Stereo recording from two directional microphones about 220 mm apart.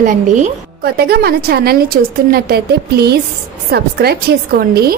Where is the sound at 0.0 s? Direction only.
35° right (ahead or behind).